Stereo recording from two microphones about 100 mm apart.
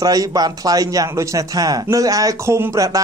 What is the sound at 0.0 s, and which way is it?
A man's voice, 35° right (ahead or behind).